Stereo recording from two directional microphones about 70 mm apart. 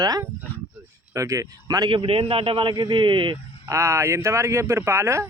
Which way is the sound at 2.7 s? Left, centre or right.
Right.